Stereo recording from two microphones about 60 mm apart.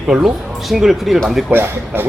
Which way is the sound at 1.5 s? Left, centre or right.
Right.